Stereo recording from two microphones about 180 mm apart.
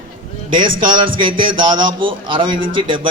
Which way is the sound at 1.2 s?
30° right (ahead or behind).